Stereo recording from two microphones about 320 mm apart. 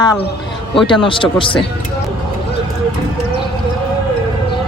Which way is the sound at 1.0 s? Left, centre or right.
Centre.